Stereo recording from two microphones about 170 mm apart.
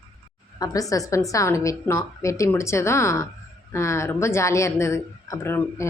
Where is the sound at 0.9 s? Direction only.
20° left (ahead or behind).